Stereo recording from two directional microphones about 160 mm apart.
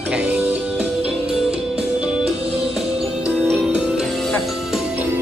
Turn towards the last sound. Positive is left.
turn(degrees=0)  # may be behind; listen again after turning